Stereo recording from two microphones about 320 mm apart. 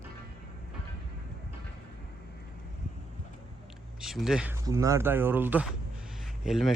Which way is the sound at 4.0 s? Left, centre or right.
Centre.